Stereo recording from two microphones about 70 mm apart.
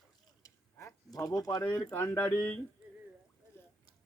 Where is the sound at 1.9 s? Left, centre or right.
Left.